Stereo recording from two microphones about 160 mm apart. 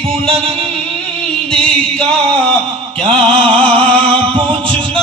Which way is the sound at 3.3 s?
35° right (ahead or behind).